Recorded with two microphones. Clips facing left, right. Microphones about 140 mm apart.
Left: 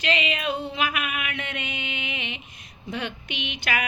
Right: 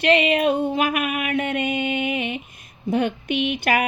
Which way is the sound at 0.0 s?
60° right (ahead or behind).